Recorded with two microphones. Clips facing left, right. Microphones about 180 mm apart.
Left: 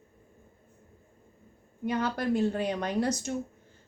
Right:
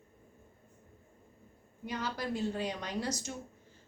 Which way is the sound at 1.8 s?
55° left (ahead or behind).